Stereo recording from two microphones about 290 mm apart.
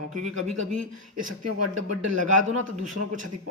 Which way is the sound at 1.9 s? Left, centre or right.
Right.